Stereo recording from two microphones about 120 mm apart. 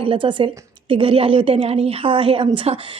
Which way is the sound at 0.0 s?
45° right (ahead or behind).